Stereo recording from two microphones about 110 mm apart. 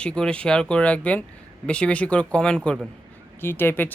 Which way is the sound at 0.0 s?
10° left (ahead or behind).